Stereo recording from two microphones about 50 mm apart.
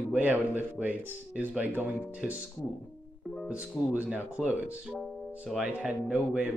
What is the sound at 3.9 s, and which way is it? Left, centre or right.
Speech, right.